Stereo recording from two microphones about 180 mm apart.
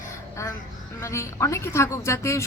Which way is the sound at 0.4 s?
15° left (ahead or behind).